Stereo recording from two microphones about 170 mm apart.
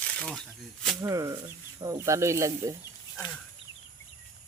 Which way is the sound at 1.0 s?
20° right (ahead or behind).